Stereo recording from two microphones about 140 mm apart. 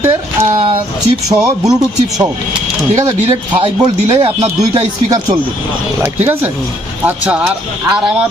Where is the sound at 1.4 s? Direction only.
25° right (ahead or behind).